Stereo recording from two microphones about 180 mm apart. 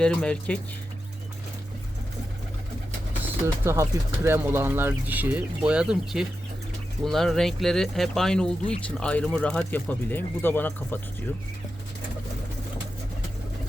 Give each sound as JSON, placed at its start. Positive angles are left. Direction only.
{"t": 0.0, "sound": "speech", "side_deg": 5}
{"t": 3.4, "sound": "speech", "side_deg": -15}